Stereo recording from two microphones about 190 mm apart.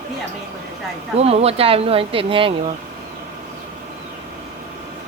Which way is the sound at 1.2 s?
30° right (ahead or behind).